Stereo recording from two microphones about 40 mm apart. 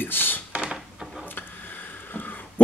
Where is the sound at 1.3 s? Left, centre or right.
Left.